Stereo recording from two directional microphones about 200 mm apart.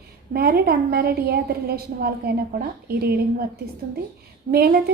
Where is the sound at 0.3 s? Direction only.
50° right (ahead or behind).